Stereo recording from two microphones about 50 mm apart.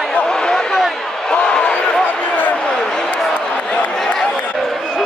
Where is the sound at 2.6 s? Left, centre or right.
Centre.